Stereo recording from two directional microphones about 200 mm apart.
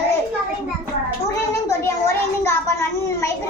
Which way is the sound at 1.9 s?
15° left (ahead or behind).